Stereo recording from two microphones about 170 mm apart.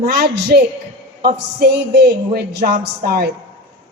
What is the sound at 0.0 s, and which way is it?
A woman's voice, 65° right (ahead or behind).